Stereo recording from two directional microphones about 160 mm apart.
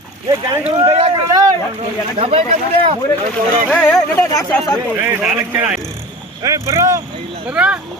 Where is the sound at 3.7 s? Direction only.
10° left (ahead or behind).